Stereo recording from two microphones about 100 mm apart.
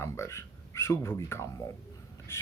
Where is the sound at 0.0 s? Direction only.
30° left (ahead or behind).